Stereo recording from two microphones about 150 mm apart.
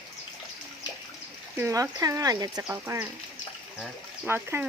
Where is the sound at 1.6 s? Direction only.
20° right (ahead or behind).